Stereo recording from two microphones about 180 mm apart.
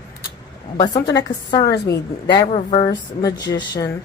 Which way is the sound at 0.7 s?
25° left (ahead or behind).